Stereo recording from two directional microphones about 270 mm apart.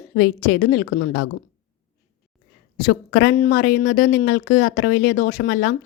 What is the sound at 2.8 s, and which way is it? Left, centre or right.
A woman's voice, left.